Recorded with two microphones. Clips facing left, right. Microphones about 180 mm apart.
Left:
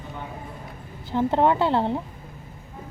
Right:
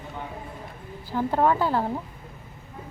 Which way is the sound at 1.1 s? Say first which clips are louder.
Left 2 dB; 20° left (ahead or behind).